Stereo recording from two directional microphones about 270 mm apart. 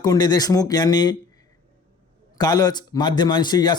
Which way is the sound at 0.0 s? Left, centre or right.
Centre.